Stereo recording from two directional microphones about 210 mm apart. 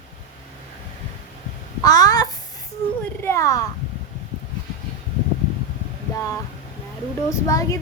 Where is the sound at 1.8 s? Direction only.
20° left (ahead or behind).